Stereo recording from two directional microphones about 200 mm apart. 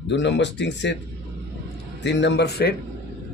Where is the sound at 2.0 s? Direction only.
60° left (ahead or behind).